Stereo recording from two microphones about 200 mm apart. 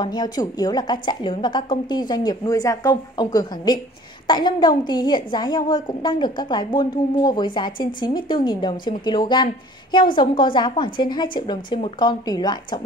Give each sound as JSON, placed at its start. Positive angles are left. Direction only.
{"t": 0.0, "sound": "a woman's voice", "side_deg": 20}